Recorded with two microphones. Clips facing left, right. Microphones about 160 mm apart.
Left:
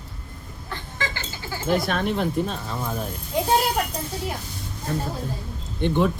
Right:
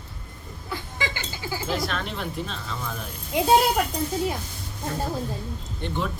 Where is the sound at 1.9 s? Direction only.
55° left (ahead or behind).